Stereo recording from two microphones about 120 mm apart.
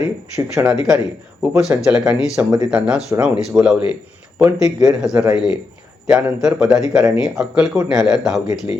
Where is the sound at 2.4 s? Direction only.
15° right (ahead or behind).